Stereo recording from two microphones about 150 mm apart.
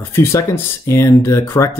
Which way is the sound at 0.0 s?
15° left (ahead or behind).